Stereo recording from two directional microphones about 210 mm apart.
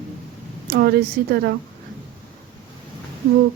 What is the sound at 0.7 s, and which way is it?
Speech, 45° right (ahead or behind).